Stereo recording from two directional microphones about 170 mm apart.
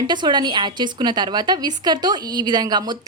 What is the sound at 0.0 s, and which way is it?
A woman's voice, 25° right (ahead or behind).